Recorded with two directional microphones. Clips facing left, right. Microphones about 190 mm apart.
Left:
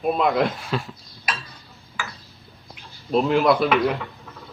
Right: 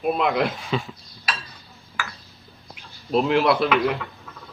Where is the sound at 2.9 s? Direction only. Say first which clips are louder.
Even; centre (ahead or behind).